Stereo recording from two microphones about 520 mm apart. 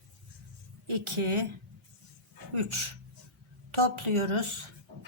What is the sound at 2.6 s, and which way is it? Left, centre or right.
Speech, right.